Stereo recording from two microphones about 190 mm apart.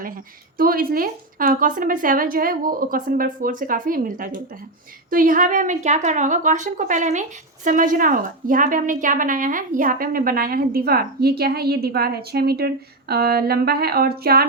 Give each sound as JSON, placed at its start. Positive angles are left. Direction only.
{"t": 0.5, "sound": "a woman's voice", "side_deg": -50}